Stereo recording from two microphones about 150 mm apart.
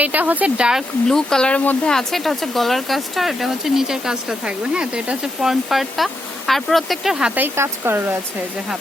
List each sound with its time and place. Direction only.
0.0 s speech: 10° right (ahead or behind)